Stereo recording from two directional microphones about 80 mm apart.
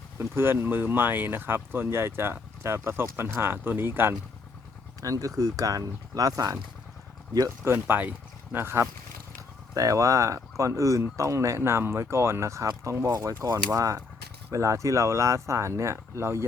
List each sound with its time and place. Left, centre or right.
0.2 s speech: right
5.0 s speech: right
7.6 s speech: right
9.7 s speech: right
13.1 s speech: right